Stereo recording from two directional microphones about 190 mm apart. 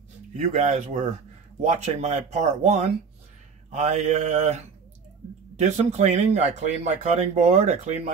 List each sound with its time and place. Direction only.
0.3 s speech: 40° right (ahead or behind)